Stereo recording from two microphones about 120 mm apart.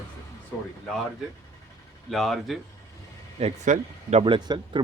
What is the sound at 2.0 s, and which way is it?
Speech, centre (ahead or behind).